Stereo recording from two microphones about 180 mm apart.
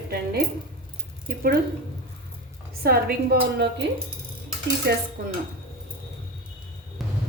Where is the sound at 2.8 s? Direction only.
55° right (ahead or behind).